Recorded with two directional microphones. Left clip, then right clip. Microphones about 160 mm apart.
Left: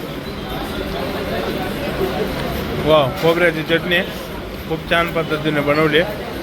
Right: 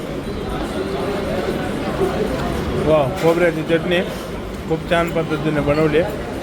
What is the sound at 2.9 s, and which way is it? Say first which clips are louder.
Speech: left 2 dB; centre (ahead or behind).